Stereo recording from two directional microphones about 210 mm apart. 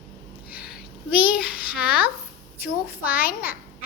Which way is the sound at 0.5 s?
5° right (ahead or behind).